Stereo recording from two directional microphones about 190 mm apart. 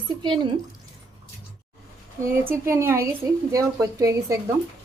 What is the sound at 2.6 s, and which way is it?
Speech, 15° right (ahead or behind).